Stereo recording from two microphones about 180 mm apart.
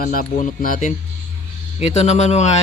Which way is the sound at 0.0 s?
50° left (ahead or behind).